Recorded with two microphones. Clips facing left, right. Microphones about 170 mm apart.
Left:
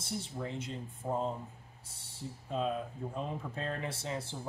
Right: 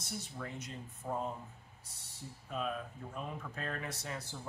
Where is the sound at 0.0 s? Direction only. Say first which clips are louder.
Left 5 dB; 25° left (ahead or behind).